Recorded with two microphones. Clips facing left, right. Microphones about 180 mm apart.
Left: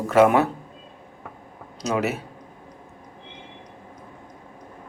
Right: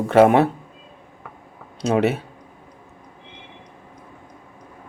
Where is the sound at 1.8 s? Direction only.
30° right (ahead or behind).